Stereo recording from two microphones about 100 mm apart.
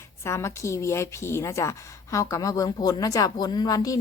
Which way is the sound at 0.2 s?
30° left (ahead or behind).